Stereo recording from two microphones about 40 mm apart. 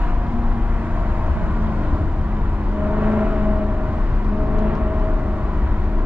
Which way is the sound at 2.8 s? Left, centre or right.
Right.